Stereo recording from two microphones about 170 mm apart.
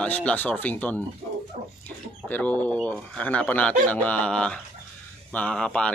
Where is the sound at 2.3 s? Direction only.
10° left (ahead or behind).